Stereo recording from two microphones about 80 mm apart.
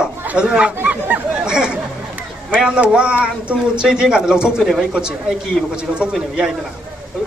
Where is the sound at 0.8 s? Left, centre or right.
Right.